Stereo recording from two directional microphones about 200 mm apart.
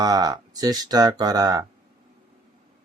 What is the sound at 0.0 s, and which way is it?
Speech, 20° right (ahead or behind).